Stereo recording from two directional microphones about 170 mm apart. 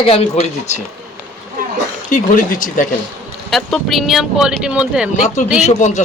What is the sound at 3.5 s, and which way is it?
Speech, centre (ahead or behind).